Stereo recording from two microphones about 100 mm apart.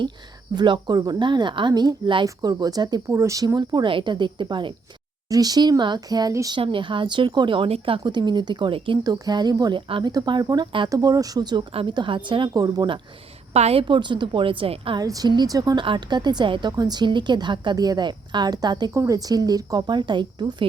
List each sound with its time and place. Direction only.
0.5 s a woman's voice: 50° right (ahead or behind)
2.2 s speech: 40° right (ahead or behind)
3.1 s a woman's voice: 30° right (ahead or behind); by 4.7 s 50° right (ahead or behind)
5.3 s speech: 40° right (ahead or behind)
6.6 s a woman's voice: 55° right (ahead or behind)
9.0 s a woman's voice: 40° right (ahead or behind)
10.8 s speech: 35° right (ahead or behind)
11.7 s a woman's voice: 70° right (ahead or behind)
11.9 s a woman's voice: 55° right (ahead or behind)
12.5 s speech: 40° right (ahead or behind)
13.5 s a woman's voice: 90° right
13.8 s a woman's voice: 50° right (ahead or behind)
15.0 s speech: 40° right (ahead or behind)
15.8 s a woman's voice: 50° right (ahead or behind)